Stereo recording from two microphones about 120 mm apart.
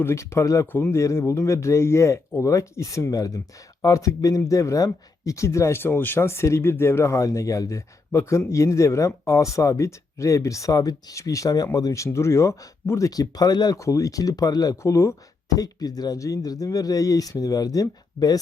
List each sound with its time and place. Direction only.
0.0 s speech: 25° left (ahead or behind)